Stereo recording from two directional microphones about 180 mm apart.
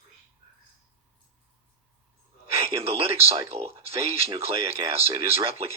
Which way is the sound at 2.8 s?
35° right (ahead or behind).